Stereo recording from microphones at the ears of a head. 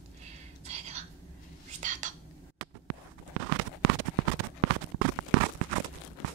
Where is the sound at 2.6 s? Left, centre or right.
Right.